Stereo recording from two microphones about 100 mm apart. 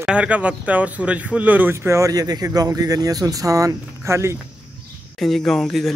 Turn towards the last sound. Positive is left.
turn(degrees=5)  # may be behind; listen again after turning